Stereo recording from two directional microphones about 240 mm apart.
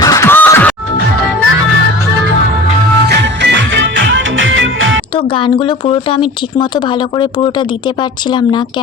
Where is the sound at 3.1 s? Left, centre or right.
Right.